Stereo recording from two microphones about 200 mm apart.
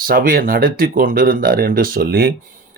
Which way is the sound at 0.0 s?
45° right (ahead or behind).